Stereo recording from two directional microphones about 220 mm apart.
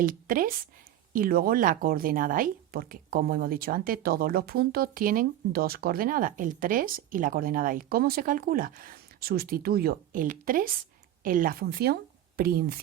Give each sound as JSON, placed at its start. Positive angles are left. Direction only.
{"t": 0.0, "sound": "speech", "side_deg": -40}